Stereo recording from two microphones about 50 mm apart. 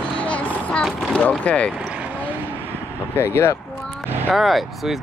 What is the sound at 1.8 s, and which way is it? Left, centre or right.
Vehicle, right.